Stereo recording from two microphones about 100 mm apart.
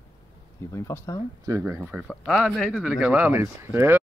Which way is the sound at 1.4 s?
30° right (ahead or behind).